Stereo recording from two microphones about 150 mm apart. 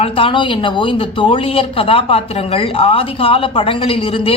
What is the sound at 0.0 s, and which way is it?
Speech, 35° left (ahead or behind).